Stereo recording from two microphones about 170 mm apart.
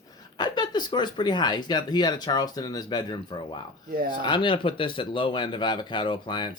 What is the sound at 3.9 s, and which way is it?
Speech, 60° right (ahead or behind).